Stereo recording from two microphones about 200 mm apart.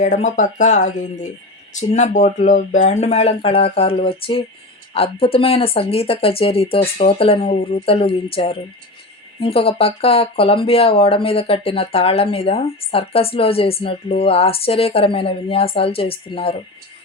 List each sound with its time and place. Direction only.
0.0 s speech: 35° left (ahead or behind)